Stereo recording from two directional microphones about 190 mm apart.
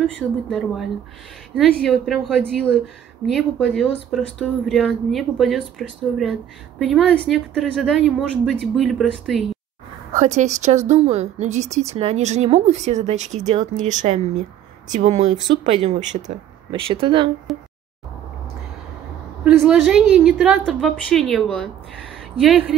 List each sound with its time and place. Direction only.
0.0 s speech: centre (ahead or behind)
10.1 s a woman's voice: 40° right (ahead or behind)
15.3 s speech: 25° right (ahead or behind)
15.7 s a woman's voice: 35° right (ahead or behind)
17.5 s speech: centre (ahead or behind)
19.4 s speech: 5° right (ahead or behind)
22.1 s a sound: centre (ahead or behind)